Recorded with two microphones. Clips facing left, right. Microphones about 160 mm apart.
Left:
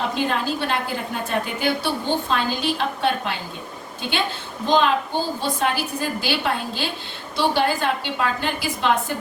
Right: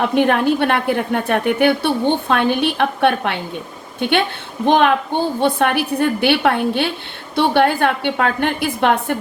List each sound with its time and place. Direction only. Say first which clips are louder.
0.0 s a woman's voice: right 8 dB; 60° right (ahead or behind)